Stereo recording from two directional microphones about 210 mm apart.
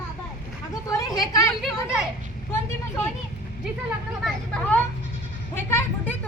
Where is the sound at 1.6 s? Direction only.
5° right (ahead or behind).